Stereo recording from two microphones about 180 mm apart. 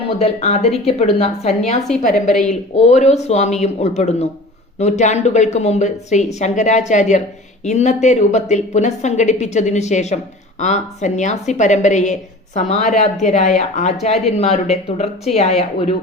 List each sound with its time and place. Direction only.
0.0 s a woman's voice: 35° left (ahead or behind)